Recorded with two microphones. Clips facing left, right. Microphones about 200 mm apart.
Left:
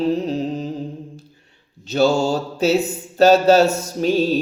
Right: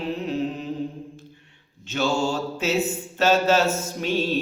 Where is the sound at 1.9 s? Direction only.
35° left (ahead or behind).